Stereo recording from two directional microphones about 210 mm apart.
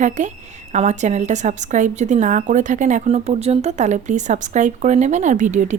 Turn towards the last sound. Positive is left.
turn(degrees=-35)  # may be behind; listen again after turning